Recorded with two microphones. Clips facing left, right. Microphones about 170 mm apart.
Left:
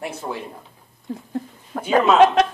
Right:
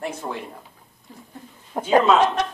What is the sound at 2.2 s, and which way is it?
Speech, 90° left.